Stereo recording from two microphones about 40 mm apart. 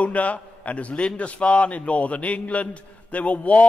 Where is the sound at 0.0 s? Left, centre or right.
Left.